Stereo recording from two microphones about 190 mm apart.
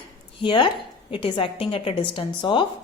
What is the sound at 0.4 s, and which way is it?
A woman's voice, 25° left (ahead or behind).